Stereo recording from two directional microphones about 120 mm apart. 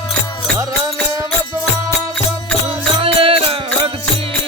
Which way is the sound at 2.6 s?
50° right (ahead or behind).